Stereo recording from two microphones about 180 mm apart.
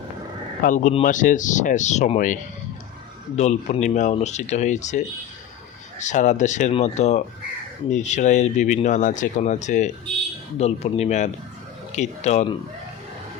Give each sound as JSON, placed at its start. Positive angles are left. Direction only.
{"t": 0.6, "sound": "speech", "side_deg": 45}